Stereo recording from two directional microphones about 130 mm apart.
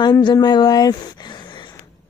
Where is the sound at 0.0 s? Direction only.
35° left (ahead or behind).